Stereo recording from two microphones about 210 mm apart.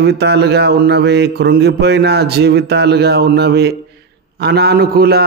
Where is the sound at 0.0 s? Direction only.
50° right (ahead or behind).